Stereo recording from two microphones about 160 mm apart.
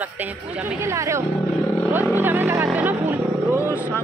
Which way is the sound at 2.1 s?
15° right (ahead or behind).